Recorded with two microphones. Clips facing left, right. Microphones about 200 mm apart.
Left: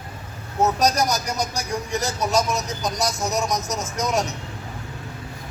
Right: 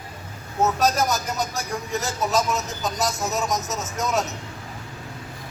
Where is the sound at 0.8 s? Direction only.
15° left (ahead or behind).